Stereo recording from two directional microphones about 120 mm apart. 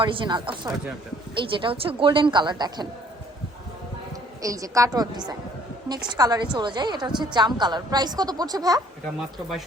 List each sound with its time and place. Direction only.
0.0 s a woman's voice: 45° right (ahead or behind)
4.4 s a woman's voice: 30° right (ahead or behind)